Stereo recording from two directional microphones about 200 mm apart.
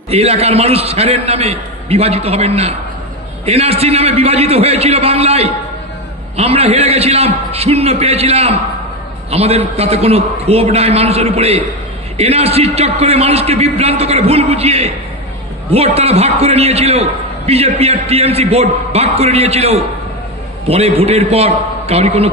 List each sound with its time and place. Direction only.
0.1 s a man's voice: 30° right (ahead or behind)